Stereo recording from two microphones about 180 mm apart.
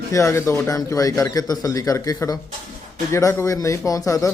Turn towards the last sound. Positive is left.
turn(degrees=15)  # may be behind; listen again after turning